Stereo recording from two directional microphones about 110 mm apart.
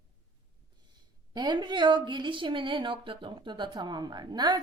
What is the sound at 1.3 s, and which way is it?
A woman's voice, 40° right (ahead or behind).